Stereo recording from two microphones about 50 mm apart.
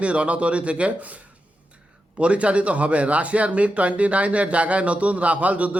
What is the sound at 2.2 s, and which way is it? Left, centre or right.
A man's voice, right.